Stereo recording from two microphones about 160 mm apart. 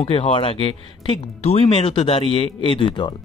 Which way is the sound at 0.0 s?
35° left (ahead or behind).